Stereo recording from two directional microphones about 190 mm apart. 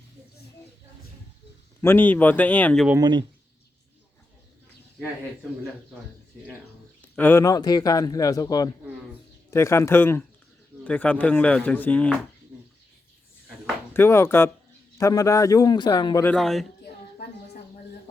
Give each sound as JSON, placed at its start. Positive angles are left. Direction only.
{"t": 1.8, "sound": "speech", "side_deg": 10}
{"t": 3.0, "sound": "speech", "side_deg": -25}
{"t": 7.0, "sound": "a man's voice", "side_deg": 10}
{"t": 12.5, "sound": "bathtub", "side_deg": -5}
{"t": 13.9, "sound": "speech", "side_deg": 10}
{"t": 16.2, "sound": "a man's voice", "side_deg": 5}